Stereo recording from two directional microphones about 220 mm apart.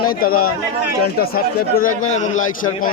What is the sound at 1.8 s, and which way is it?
Speech, 70° left (ahead or behind).